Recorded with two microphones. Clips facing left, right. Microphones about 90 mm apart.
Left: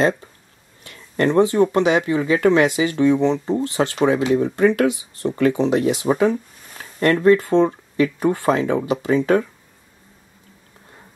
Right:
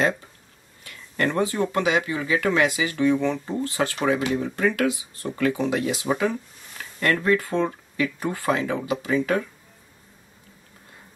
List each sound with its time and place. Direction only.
0.8 s speech: 30° left (ahead or behind)
6.8 s a sound: 35° left (ahead or behind)
7.2 s speech: 30° left (ahead or behind)